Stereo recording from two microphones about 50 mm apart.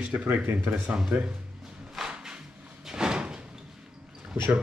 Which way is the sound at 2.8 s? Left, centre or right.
Centre.